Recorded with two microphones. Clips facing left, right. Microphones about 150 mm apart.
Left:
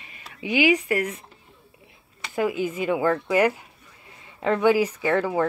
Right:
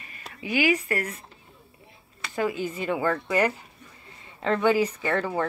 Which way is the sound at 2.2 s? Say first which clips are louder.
Left 3 dB; 10° left (ahead or behind).